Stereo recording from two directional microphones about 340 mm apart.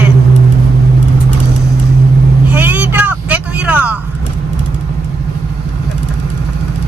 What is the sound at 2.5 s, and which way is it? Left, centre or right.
Vehicle, centre.